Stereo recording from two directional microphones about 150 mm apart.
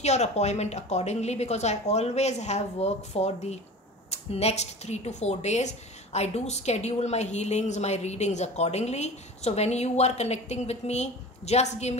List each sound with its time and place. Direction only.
0.0 s speech: 50° left (ahead or behind)